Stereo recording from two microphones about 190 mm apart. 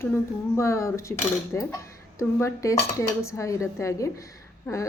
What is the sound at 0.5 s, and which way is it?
Speech, 15° left (ahead or behind).